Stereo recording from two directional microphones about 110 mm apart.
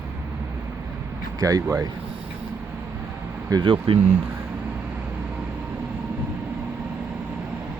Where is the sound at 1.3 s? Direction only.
35° right (ahead or behind).